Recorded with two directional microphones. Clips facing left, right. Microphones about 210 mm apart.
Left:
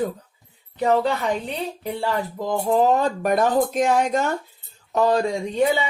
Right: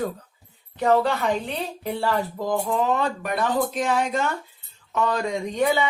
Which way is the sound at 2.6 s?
35° left (ahead or behind).